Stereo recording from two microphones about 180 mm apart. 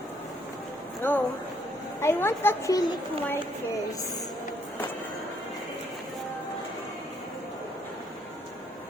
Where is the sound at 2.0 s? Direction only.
15° left (ahead or behind).